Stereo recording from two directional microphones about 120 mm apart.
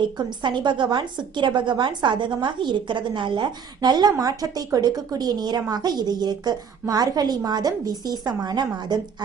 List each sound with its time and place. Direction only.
0.0 s a woman's voice: 40° right (ahead or behind)